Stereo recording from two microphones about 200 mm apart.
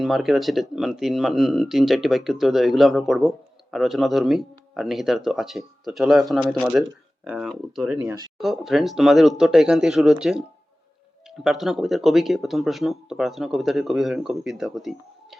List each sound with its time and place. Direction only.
0.0 s speech: centre (ahead or behind)
8.0 s speech: 20° right (ahead or behind)
8.4 s speech: centre (ahead or behind)
11.4 s speech: centre (ahead or behind)